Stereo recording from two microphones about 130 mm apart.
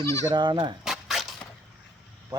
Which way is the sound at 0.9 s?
Centre (ahead or behind).